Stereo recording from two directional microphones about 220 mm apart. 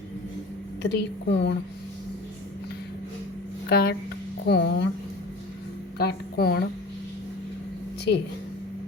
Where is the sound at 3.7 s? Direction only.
50° left (ahead or behind).